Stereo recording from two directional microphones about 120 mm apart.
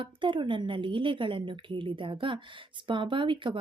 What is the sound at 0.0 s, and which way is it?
A woman's voice, 45° right (ahead or behind).